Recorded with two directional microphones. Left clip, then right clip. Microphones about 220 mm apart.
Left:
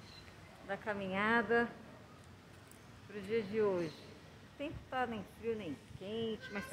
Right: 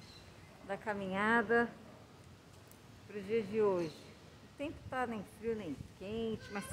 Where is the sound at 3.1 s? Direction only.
20° right (ahead or behind).